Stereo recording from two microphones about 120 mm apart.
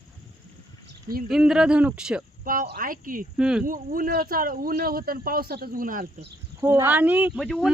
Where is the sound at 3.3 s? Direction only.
5° right (ahead or behind).